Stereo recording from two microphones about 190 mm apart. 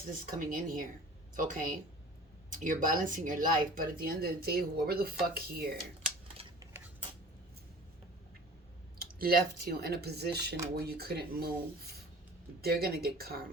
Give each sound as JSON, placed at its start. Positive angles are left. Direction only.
{"t": 0.0, "sound": "speech", "side_deg": -45}
{"t": 6.4, "sound": "cutlery", "side_deg": -30}
{"t": 9.0, "sound": "speech", "side_deg": -50}